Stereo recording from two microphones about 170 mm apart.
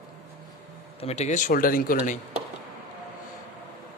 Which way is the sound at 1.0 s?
40° left (ahead or behind).